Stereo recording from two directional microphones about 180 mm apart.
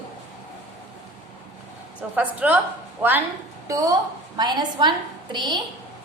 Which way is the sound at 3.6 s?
20° right (ahead or behind).